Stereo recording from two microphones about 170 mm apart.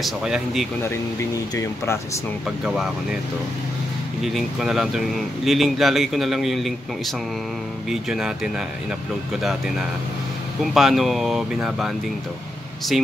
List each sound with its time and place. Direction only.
0.0 s speech: centre (ahead or behind)
1.5 s speech: 15° left (ahead or behind)
2.6 s speech: 5° right (ahead or behind)
4.2 s speech: centre (ahead or behind)
7.9 s speech: centre (ahead or behind)
9.4 s speech: centre (ahead or behind)